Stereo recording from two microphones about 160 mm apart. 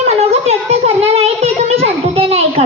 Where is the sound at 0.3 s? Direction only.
40° right (ahead or behind).